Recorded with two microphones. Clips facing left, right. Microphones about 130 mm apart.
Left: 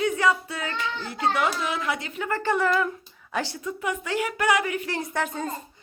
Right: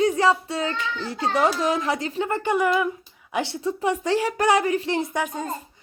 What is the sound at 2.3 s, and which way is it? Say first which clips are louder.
Speech: right 1 dB; 15° right (ahead or behind).